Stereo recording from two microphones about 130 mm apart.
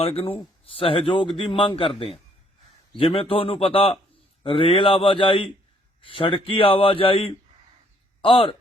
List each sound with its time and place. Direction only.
0.0 s speech: 45° left (ahead or behind)
3.0 s speech: 45° left (ahead or behind)